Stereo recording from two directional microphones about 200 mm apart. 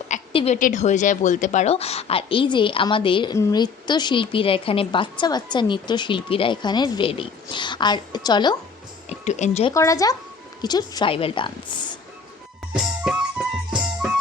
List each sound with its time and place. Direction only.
0.1 s a woman's voice: 35° left (ahead or behind)
9.0 s speech: 35° left (ahead or behind)
9.7 s a woman's voice: 15° left (ahead or behind)
12.7 s music: 5° right (ahead or behind)